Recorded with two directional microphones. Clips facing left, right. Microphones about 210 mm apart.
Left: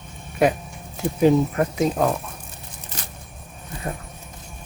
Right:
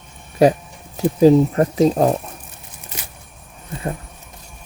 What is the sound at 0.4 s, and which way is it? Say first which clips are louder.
Speech: right 5 dB; 35° right (ahead or behind).